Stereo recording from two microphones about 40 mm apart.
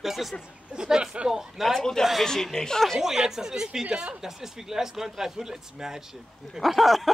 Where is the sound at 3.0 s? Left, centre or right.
Centre.